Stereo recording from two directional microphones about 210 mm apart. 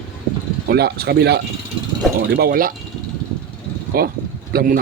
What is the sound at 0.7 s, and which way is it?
Speech, 50° right (ahead or behind).